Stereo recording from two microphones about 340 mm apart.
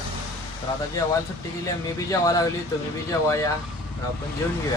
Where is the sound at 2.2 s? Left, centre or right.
Centre.